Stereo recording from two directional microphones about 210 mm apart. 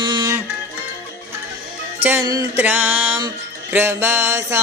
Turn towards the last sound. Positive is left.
turn(degrees=-10)  # may be behind; listen again after turning